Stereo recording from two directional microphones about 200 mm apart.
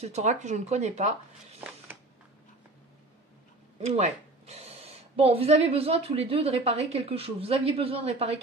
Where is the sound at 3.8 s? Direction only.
30° right (ahead or behind).